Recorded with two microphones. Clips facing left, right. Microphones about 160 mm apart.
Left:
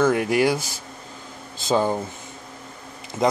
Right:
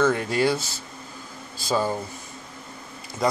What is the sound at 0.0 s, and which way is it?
Speech, 15° left (ahead or behind).